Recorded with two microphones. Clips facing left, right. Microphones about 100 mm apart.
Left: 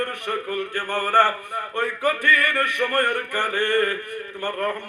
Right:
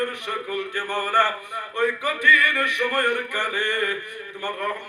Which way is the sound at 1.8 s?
50° left (ahead or behind).